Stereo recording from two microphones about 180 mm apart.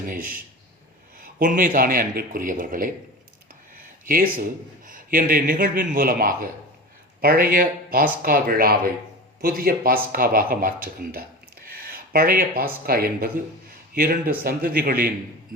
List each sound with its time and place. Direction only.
0.0 s speech: 50° right (ahead or behind)
4.0 s speech: 50° right (ahead or behind)